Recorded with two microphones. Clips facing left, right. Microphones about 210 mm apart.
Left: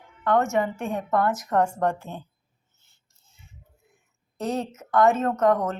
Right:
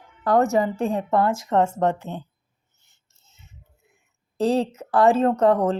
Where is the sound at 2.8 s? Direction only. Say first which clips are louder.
Right 4 dB; 20° right (ahead or behind).